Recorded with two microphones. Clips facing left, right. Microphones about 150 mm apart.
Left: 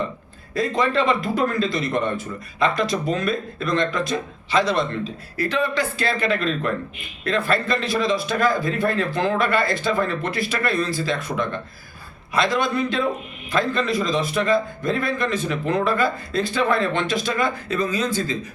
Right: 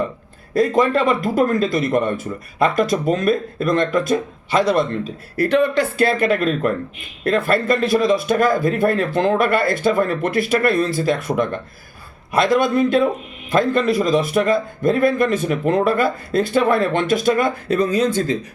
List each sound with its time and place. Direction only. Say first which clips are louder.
0.5 s a man's voice: right 5 dB; 50° right (ahead or behind)